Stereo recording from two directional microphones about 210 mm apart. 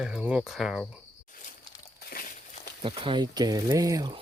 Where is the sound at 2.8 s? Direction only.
25° right (ahead or behind).